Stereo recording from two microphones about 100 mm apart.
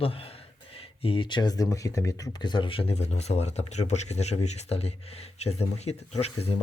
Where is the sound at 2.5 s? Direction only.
60° left (ahead or behind).